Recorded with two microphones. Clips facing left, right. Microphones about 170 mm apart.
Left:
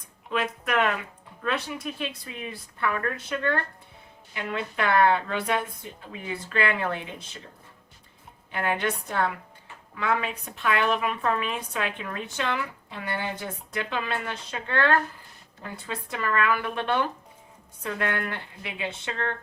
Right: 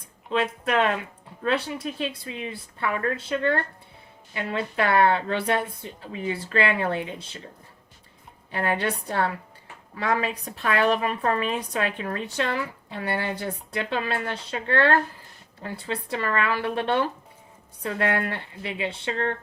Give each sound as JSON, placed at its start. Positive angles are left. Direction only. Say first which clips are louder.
{"t": 0.3, "sound": "a woman's voice", "louder": "right 3 dB", "side_deg": -30}
{"t": 8.5, "sound": "a woman's voice", "louder": "right 2 dB", "side_deg": -35}